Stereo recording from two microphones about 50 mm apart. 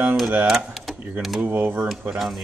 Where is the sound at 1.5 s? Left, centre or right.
Right.